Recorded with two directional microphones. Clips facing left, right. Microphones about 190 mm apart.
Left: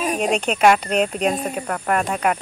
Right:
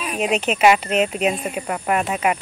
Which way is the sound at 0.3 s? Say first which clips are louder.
Right 1 dB; 5° right (ahead or behind).